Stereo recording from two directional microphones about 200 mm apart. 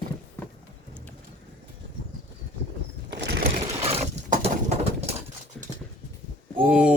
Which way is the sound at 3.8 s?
30° right (ahead or behind).